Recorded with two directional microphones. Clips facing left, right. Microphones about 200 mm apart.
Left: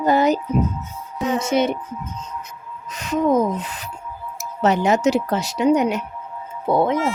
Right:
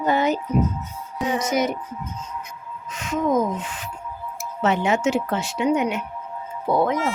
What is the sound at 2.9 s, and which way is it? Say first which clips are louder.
A woman's voice: left 3 dB; 35° left (ahead or behind).